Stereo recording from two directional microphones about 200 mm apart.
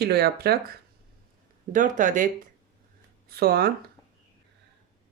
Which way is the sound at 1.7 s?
40° right (ahead or behind).